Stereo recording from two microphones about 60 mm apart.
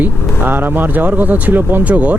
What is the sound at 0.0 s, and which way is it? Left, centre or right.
Speech, right.